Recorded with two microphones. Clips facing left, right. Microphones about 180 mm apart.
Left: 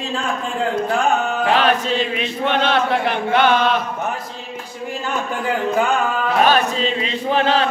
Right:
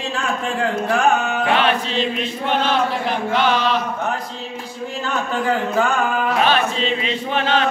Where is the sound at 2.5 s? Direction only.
65° left (ahead or behind).